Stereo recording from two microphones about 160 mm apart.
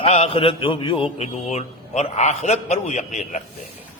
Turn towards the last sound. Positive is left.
turn(degrees=45)  # may be behind; listen again after turning